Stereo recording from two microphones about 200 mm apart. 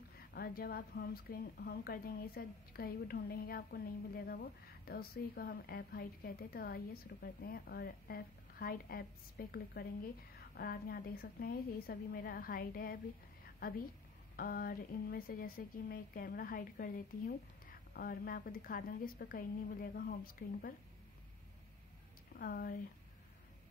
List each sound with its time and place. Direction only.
0.3 s a woman's voice: 50° left (ahead or behind)
22.4 s a woman's voice: 50° left (ahead or behind)